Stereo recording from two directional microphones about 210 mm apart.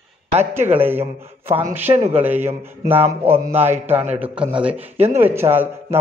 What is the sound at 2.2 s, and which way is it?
Speech, 10° right (ahead or behind).